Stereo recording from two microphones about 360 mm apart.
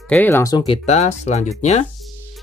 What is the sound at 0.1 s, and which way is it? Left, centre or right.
Speech, centre.